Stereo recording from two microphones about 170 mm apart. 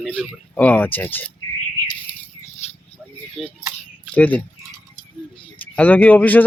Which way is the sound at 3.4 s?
Centre (ahead or behind).